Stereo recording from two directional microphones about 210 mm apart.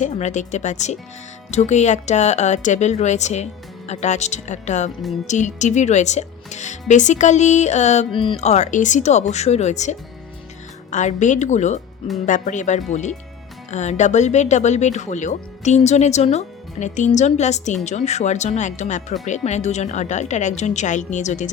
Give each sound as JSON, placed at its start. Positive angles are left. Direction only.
{"t": 0.0, "sound": "speech", "side_deg": 35}